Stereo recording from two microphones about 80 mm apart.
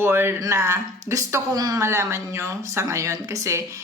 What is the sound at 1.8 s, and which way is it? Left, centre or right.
Speech, right.